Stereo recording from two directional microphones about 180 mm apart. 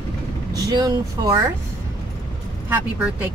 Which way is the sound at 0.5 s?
20° right (ahead or behind).